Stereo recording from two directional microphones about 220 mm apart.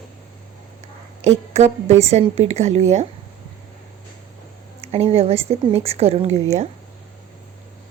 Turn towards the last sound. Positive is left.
turn(degrees=-30)  # may be behind; listen again after turning